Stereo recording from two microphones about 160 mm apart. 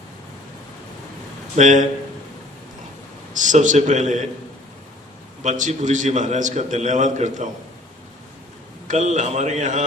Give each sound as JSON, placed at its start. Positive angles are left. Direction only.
{"t": 1.5, "sound": "a man's voice", "side_deg": -50}
{"t": 3.3, "sound": "a man's voice", "side_deg": -50}
{"t": 5.4, "sound": "a man's voice", "side_deg": -50}
{"t": 8.9, "sound": "a man's voice", "side_deg": -50}